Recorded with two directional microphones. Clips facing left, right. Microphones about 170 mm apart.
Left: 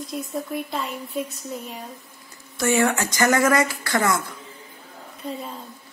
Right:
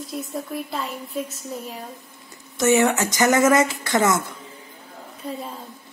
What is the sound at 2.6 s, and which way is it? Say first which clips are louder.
Speech: right 3 dB; 20° right (ahead or behind).